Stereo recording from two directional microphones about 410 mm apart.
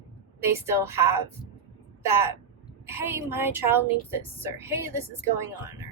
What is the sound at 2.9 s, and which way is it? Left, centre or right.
A woman's voice, centre.